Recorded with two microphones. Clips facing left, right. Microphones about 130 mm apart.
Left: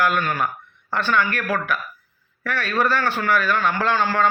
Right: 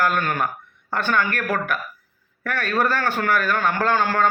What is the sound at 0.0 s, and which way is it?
Speech, 45° right (ahead or behind).